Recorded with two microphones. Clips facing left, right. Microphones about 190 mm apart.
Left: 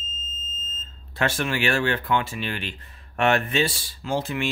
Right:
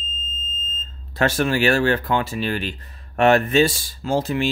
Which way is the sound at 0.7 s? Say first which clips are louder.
Right 5 dB; 40° right (ahead or behind).